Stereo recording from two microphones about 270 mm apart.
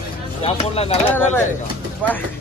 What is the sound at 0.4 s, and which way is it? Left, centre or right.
Speech, left.